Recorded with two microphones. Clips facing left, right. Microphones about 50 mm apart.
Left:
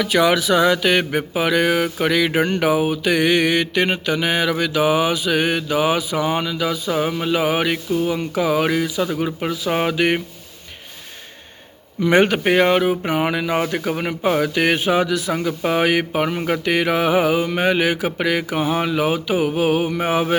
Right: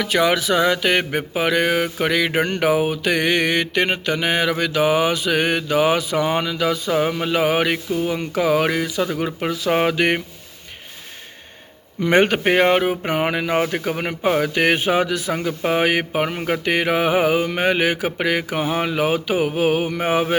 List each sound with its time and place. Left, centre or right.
0.0 s mantra: right
6.9 s mantra: right
11.9 s mantra: right
13.7 s speech: right
14.4 s mantra: right
15.3 s speech: right
16.6 s mantra: right